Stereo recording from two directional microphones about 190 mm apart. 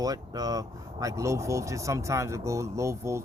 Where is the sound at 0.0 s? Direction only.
20° right (ahead or behind).